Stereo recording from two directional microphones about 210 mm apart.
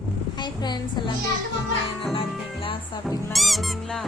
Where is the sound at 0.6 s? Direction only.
20° left (ahead or behind).